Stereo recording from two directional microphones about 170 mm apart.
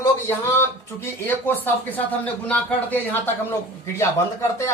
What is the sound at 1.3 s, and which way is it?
Speech, 10° left (ahead or behind).